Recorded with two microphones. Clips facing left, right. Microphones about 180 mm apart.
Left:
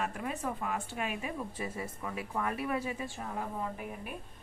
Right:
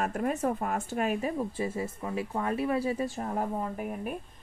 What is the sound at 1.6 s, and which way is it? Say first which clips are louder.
Speech: right 6 dB; 25° right (ahead or behind).